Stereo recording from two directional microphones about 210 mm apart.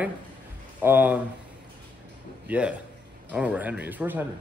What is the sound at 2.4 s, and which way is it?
A man's voice, 5° right (ahead or behind).